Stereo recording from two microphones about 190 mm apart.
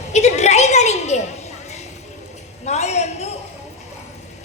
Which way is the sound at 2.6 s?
35° left (ahead or behind).